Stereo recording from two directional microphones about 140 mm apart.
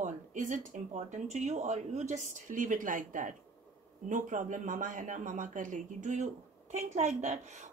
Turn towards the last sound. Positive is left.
turn(degrees=-55)  # may be behind; listen again after turning